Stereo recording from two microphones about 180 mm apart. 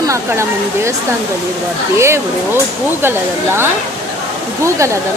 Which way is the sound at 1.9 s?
15° right (ahead or behind).